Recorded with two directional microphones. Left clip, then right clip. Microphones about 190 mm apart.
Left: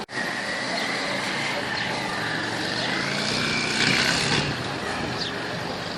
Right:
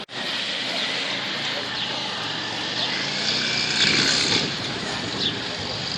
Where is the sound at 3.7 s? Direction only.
50° left (ahead or behind).